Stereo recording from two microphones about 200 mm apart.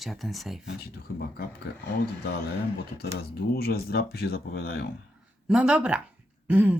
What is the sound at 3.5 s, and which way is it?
Speech, 50° left (ahead or behind).